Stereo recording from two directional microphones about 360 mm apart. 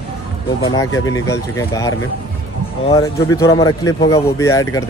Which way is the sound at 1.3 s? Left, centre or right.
Centre.